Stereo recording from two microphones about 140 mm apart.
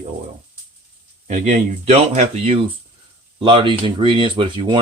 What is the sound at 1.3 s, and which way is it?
Speech, 60° right (ahead or behind).